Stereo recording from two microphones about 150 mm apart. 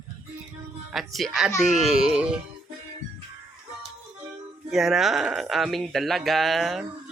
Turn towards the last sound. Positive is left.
turn(degrees=0)  # may be behind; listen again after turning